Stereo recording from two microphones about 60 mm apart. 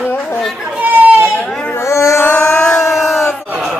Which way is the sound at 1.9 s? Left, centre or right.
Left.